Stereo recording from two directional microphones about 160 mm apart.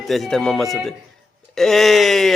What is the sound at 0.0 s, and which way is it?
A man's voice, centre (ahead or behind).